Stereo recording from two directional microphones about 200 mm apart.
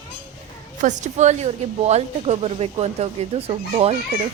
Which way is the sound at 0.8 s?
35° right (ahead or behind).